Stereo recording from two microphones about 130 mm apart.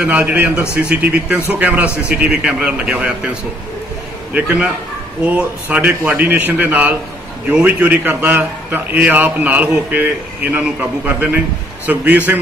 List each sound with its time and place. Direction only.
0.0 s a man's voice: 10° right (ahead or behind)
4.3 s a man's voice: 10° right (ahead or behind)